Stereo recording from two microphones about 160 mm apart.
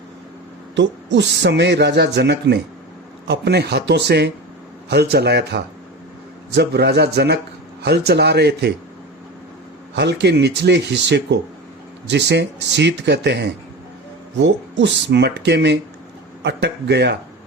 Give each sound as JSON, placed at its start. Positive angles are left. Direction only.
{"t": 1.1, "sound": "speech", "side_deg": -90}
{"t": 9.9, "sound": "speech", "side_deg": -90}